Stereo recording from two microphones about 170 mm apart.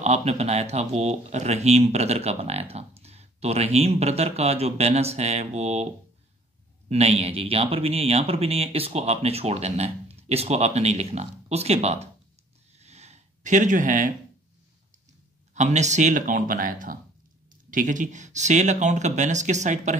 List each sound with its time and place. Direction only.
0.0 s speech: 40° right (ahead or behind)
6.9 s speech: 35° right (ahead or behind)
12.7 s a sound: 40° right (ahead or behind)
15.5 s speech: 45° right (ahead or behind)